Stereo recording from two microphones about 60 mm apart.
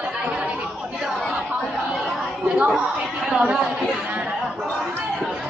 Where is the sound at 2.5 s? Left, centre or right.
Centre.